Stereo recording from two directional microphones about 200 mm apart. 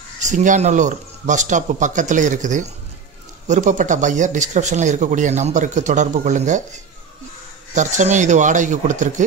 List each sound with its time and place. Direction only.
0.2 s speech: 40° right (ahead or behind)